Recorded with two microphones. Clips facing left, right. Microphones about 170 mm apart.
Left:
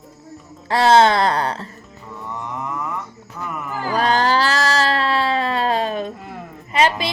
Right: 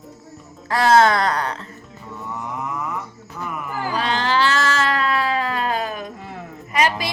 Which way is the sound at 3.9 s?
45° left (ahead or behind).